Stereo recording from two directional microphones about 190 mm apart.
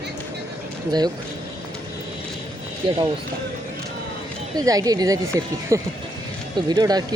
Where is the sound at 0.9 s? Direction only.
20° right (ahead or behind).